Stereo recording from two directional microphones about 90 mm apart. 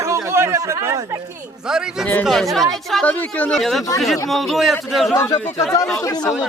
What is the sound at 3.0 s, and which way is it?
Speech, 15° left (ahead or behind).